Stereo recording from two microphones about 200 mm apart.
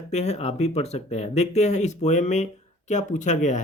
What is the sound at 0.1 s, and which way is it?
Speech, 35° left (ahead or behind).